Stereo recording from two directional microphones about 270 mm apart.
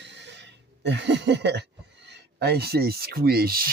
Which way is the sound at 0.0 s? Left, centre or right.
Right.